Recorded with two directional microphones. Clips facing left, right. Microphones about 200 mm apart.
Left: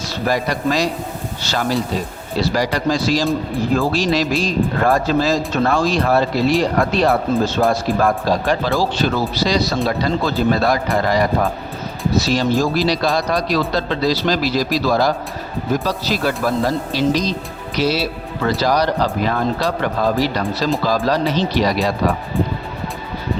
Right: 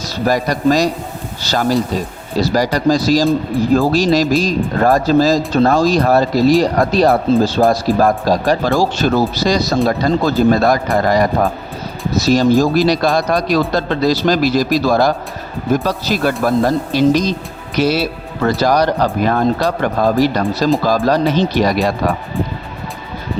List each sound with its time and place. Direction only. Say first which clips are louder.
0.1 s speech: right 4 dB; 40° right (ahead or behind)